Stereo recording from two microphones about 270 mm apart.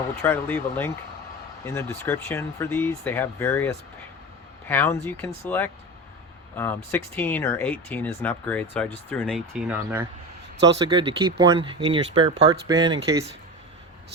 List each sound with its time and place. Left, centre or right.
0.2 s speech: centre
10.8 s speech: centre